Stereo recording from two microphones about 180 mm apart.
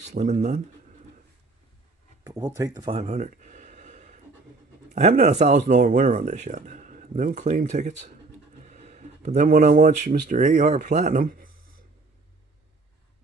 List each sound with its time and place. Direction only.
0.0 s speech: 40° right (ahead or behind)
2.2 s a sound: 20° right (ahead or behind); by 4.2 s 40° right (ahead or behind)
5.2 s speech: 40° right (ahead or behind)